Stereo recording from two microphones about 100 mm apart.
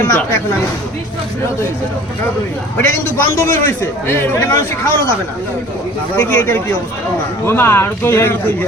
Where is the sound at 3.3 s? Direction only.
30° left (ahead or behind).